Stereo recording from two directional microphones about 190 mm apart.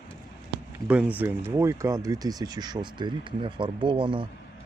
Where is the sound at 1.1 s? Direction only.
10° right (ahead or behind).